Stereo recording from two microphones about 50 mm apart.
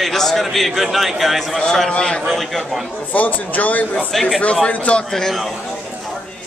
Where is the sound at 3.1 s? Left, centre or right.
Left.